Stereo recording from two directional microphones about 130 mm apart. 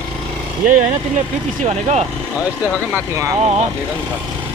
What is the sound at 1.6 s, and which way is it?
Speech, 55° right (ahead or behind).